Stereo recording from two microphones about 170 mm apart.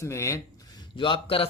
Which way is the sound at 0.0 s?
20° left (ahead or behind).